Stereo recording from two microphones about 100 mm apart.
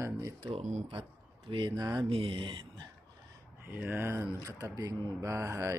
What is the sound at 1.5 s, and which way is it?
Speech, 55° right (ahead or behind).